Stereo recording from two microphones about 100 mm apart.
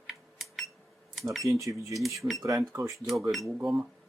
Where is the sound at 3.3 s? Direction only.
Centre (ahead or behind).